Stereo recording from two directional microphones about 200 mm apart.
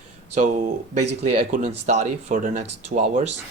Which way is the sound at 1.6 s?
35° right (ahead or behind).